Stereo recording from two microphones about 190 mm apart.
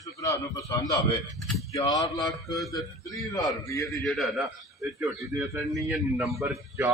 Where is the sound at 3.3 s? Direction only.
20° left (ahead or behind).